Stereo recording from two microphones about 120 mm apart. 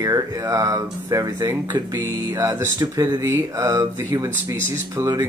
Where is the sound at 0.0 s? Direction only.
30° right (ahead or behind).